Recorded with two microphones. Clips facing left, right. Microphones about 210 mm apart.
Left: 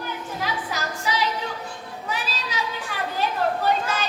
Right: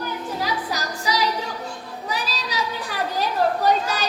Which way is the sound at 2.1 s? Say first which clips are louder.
Right 2 dB; 40° right (ahead or behind).